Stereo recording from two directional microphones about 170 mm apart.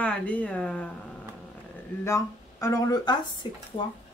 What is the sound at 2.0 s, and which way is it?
Speech, 15° left (ahead or behind).